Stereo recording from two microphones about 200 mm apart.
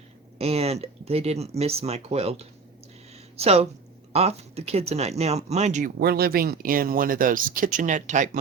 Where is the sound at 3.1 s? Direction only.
30° right (ahead or behind).